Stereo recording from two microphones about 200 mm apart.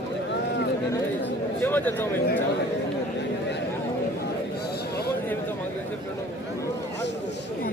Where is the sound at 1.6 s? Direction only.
10° left (ahead or behind).